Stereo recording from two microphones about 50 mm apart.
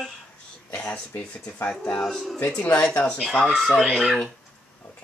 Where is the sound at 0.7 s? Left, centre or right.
Left.